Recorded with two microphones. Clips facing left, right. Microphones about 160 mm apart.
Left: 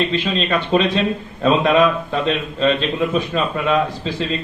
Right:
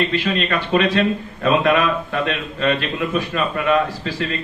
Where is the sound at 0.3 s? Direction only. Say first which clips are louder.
Left 3 dB; 15° left (ahead or behind).